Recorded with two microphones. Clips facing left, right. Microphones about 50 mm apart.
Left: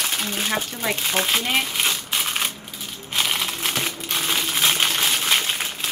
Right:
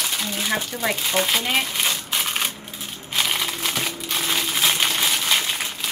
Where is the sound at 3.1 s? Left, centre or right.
Centre.